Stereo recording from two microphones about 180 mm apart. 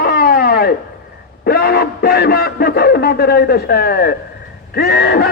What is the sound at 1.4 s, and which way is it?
A man's voice, 60° left (ahead or behind).